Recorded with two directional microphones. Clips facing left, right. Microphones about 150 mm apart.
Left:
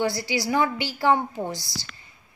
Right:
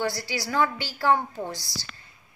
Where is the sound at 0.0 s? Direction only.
20° left (ahead or behind).